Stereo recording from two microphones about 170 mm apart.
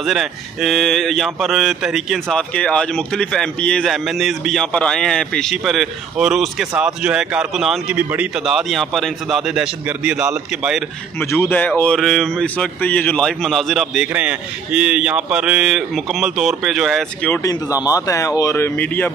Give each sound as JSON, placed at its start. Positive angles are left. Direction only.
{"t": 0.0, "sound": "speech", "side_deg": 0}
{"t": 11.1, "sound": "speech", "side_deg": 10}
{"t": 17.3, "sound": "speech", "side_deg": 20}